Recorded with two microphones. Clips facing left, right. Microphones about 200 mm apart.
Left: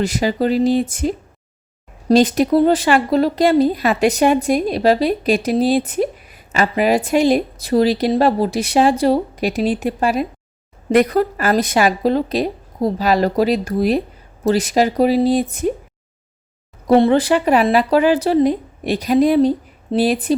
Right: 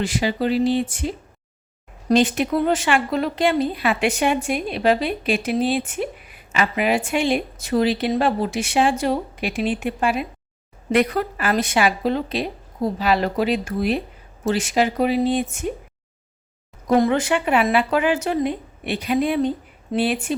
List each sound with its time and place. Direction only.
0.0 s speech: 40° left (ahead or behind)
16.8 s speech: 30° left (ahead or behind)